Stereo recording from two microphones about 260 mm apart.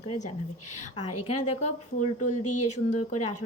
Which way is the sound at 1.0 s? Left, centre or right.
Left.